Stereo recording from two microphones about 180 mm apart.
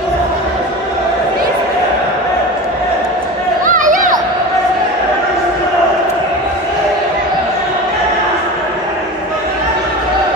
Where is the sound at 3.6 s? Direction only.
45° right (ahead or behind).